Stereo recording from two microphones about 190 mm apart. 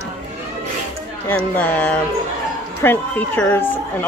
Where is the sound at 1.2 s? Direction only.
10° left (ahead or behind).